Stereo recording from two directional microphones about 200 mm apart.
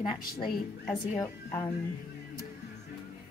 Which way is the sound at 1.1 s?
15° left (ahead or behind).